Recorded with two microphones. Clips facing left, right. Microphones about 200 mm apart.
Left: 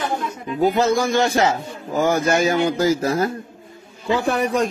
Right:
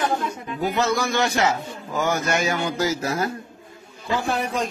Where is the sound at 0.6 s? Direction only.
30° left (ahead or behind).